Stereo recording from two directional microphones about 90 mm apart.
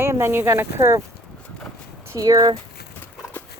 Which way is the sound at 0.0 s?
30° right (ahead or behind).